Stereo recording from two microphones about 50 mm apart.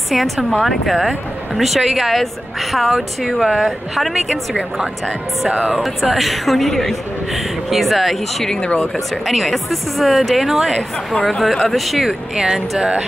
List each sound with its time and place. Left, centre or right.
0.1 s speech: centre
5.5 s speech: right
5.8 s speech: centre
8.5 s speech: centre
8.9 s speech: centre
11.2 s speech: centre